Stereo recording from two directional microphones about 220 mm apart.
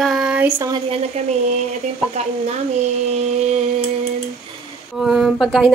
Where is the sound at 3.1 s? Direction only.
30° right (ahead or behind).